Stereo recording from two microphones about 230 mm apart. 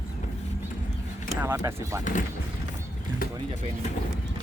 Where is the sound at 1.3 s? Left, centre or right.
Centre.